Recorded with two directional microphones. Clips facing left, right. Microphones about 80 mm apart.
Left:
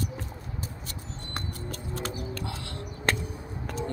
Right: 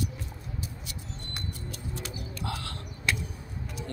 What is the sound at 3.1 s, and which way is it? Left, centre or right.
Music, left.